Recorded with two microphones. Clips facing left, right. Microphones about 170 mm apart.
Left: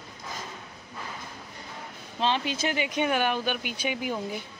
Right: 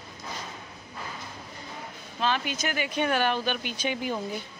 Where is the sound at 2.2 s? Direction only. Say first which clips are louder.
Left 1 dB; 25° left (ahead or behind); by 4.4 s 10° left (ahead or behind).